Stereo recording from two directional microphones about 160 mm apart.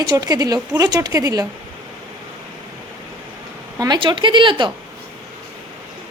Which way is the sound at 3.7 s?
25° right (ahead or behind).